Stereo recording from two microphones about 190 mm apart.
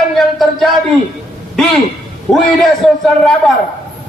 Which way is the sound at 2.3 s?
5° left (ahead or behind).